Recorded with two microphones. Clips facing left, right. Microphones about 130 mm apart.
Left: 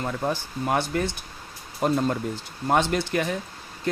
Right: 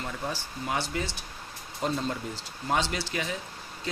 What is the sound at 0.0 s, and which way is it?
Speech, 50° left (ahead or behind).